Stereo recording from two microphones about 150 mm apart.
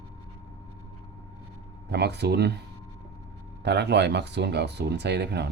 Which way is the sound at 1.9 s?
90° right.